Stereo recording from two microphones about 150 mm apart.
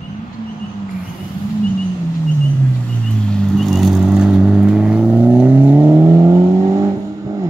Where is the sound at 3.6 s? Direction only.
Centre (ahead or behind).